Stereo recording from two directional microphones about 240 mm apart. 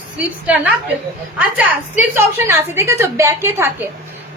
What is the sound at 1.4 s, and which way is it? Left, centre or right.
A woman's voice, centre.